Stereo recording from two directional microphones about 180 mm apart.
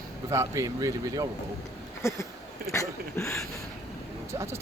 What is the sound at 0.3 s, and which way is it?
Speech, 15° right (ahead or behind).